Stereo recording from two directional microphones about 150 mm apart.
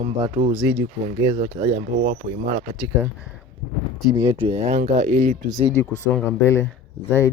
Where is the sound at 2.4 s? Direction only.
50° right (ahead or behind).